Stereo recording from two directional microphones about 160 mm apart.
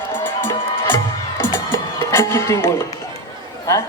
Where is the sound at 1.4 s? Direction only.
15° left (ahead or behind).